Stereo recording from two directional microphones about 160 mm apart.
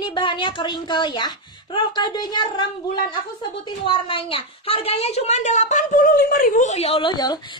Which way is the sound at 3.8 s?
30° left (ahead or behind).